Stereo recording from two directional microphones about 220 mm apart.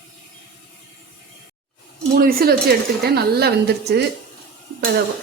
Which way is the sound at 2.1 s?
45° right (ahead or behind).